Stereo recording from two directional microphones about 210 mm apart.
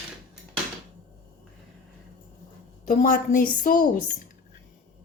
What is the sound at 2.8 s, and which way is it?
Speech, 35° left (ahead or behind).